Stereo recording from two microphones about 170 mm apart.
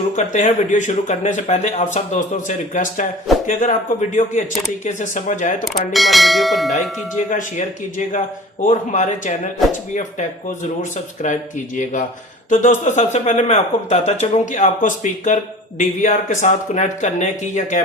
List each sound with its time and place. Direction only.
0.2 s speech: 45° left (ahead or behind)
5.6 s speech: centre (ahead or behind)
7.3 s speech: 50° left (ahead or behind)
12.5 s speech: 45° left (ahead or behind)